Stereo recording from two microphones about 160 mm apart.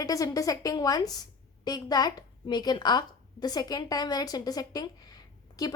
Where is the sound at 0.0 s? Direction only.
25° left (ahead or behind).